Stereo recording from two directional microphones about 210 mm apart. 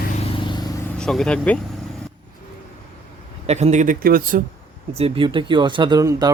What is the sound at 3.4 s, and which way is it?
Speech, 30° right (ahead or behind).